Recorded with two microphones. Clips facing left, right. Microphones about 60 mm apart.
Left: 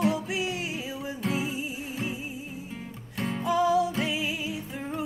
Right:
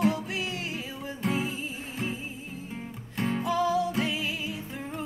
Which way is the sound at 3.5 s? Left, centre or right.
Centre.